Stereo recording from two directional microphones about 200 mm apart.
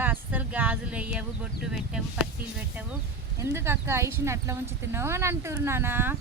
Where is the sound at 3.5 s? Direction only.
10° right (ahead or behind).